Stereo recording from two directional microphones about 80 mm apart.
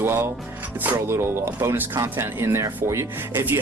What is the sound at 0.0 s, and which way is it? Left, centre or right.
Speech, right.